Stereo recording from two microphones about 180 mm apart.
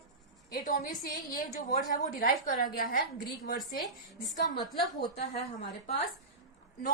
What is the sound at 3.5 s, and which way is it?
Speech, centre (ahead or behind).